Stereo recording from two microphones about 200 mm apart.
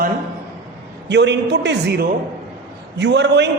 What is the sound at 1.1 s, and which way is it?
A man's voice, 60° right (ahead or behind).